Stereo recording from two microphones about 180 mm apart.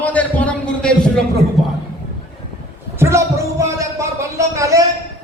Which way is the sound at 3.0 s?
15° right (ahead or behind).